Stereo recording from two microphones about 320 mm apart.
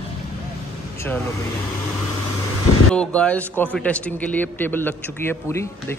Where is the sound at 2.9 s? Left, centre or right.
Centre.